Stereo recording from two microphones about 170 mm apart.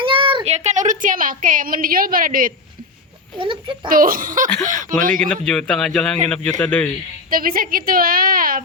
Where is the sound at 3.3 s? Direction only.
30° right (ahead or behind).